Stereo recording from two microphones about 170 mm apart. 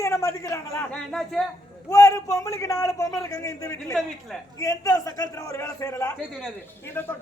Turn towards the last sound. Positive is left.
turn(degrees=10)  # may be behind; listen again after turning